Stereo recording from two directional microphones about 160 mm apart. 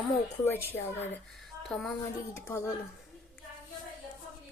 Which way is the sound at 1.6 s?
Centre (ahead or behind).